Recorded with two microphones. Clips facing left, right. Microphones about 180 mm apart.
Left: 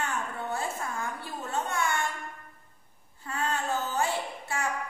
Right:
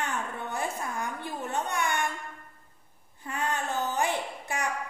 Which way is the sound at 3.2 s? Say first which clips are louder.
Even; 15° right (ahead or behind).